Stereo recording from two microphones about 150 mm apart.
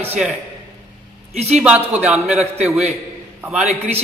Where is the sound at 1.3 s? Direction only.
45° right (ahead or behind).